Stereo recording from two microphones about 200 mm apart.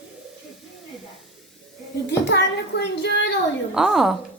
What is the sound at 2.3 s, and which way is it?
Speech, 60° left (ahead or behind).